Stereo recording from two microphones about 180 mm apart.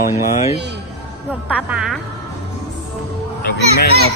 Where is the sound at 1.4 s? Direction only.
5° right (ahead or behind).